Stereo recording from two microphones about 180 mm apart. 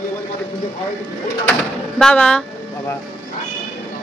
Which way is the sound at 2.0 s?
5° left (ahead or behind).